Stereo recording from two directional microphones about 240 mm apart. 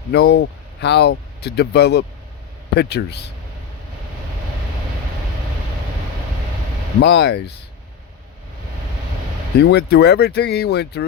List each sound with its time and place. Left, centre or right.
0.1 s speech: left
7.0 s speech: left
9.6 s speech: left